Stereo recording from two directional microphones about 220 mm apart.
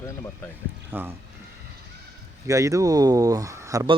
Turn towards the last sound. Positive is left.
turn(degrees=-15)  # may be behind; listen again after turning